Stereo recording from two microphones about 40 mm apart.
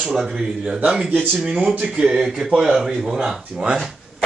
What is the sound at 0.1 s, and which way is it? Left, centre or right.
Speech, centre.